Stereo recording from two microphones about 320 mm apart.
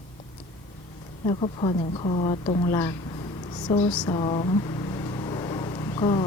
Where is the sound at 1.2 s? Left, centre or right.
Centre.